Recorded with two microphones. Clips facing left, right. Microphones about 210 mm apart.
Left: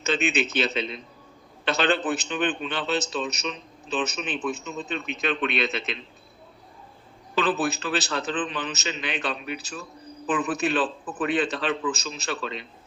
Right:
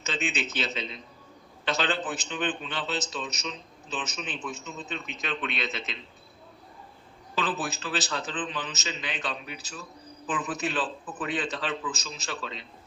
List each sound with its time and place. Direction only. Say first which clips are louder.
0.0 s a man's voice: left 7 dB; 65° left (ahead or behind)
7.3 s a man's voice: left 6 dB; 60° left (ahead or behind)